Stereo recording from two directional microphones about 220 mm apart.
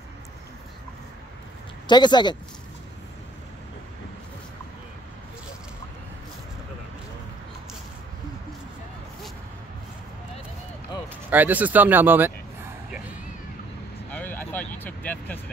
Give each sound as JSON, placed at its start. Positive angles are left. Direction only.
{"t": 1.9, "sound": "a man's voice", "side_deg": 20}
{"t": 11.2, "sound": "speech", "side_deg": -10}
{"t": 14.1, "sound": "vehicle", "side_deg": 10}